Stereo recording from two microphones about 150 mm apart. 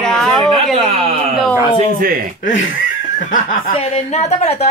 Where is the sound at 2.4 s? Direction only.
60° left (ahead or behind).